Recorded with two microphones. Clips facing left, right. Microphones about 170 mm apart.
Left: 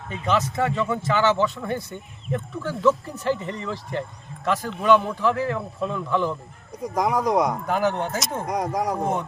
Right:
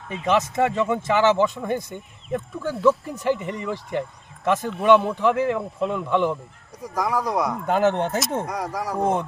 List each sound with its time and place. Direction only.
0.1 s a man's voice: 15° right (ahead or behind)
6.9 s speech: 20° left (ahead or behind)
7.7 s a man's voice: 25° right (ahead or behind)
8.4 s speech: 20° left (ahead or behind)